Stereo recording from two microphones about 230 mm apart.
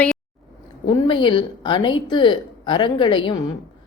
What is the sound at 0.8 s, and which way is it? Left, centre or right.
Speech, left.